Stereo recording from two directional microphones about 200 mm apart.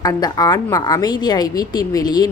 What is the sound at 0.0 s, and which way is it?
A woman's voice, 20° left (ahead or behind).